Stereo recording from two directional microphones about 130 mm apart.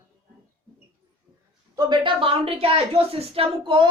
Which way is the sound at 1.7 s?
30° right (ahead or behind).